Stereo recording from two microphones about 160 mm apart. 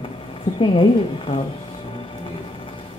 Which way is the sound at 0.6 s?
35° left (ahead or behind).